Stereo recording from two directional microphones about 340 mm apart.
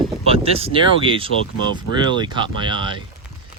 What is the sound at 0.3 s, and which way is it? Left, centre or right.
Speech, centre.